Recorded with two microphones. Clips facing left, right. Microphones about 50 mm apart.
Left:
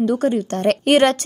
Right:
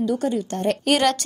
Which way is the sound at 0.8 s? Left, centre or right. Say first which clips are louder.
Left 5 dB; left.